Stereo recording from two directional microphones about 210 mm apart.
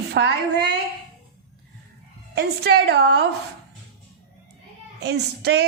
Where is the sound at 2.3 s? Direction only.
50° right (ahead or behind).